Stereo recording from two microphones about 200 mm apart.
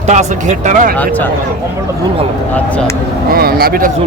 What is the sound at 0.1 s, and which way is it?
Speech, 35° right (ahead or behind).